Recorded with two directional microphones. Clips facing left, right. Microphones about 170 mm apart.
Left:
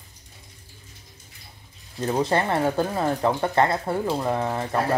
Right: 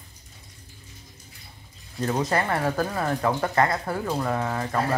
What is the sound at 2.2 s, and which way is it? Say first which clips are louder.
Speech: left 4 dB; 25° left (ahead or behind).